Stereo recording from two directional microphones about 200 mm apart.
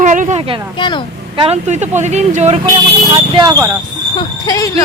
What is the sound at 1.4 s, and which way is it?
Speech, 35° right (ahead or behind).